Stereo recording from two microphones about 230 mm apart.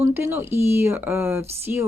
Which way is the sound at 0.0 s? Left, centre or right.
Centre.